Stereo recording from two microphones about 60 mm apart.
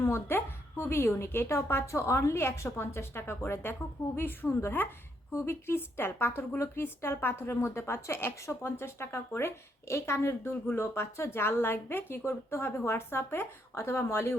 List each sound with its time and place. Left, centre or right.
0.0 s a woman's voice: left